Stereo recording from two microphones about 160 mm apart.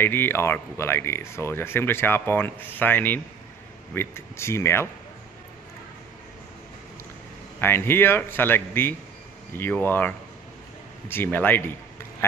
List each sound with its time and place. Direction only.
0.0 s speech: 15° left (ahead or behind)
7.6 s speech: 15° left (ahead or behind)